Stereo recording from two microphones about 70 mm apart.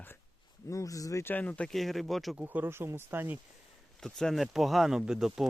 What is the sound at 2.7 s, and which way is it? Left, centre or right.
Speech, right.